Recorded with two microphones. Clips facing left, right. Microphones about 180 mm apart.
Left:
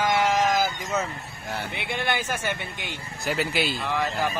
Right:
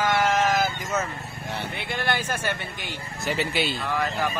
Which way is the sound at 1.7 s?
20° left (ahead or behind).